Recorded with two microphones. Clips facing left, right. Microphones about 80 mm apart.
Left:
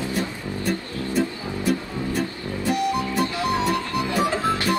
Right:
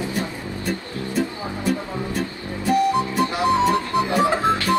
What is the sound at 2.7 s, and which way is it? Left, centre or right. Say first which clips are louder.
Music: right 5 dB; right.